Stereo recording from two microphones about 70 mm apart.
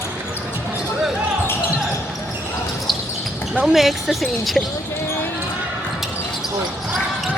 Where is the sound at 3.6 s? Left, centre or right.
Centre.